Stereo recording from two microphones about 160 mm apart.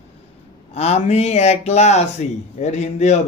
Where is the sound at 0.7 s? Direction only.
40° left (ahead or behind).